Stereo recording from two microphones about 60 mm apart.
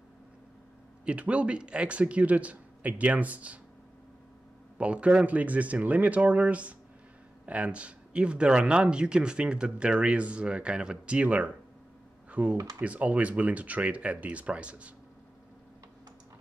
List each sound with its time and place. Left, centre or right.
1.0 s speech: right
4.7 s speech: centre
12.5 s speech: right
12.8 s speech: right